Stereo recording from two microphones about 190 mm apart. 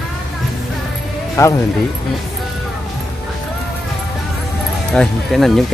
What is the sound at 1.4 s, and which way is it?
Speech, 15° left (ahead or behind).